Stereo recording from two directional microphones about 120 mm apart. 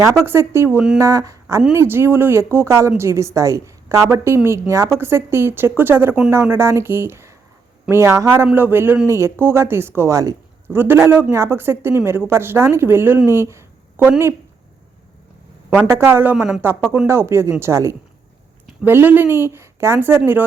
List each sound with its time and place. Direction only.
0.0 s a woman's voice: 25° right (ahead or behind)
15.8 s a woman's voice: 20° right (ahead or behind)